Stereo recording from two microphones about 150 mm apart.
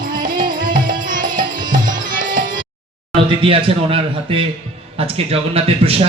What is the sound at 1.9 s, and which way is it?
Music, 30° right (ahead or behind).